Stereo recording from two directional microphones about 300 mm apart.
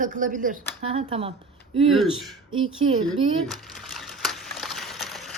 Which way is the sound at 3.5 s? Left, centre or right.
Centre.